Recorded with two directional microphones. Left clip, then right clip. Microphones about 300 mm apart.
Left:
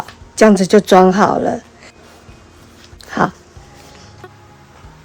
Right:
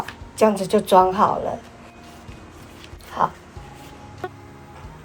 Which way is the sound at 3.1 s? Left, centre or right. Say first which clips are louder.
Left 5 dB; left.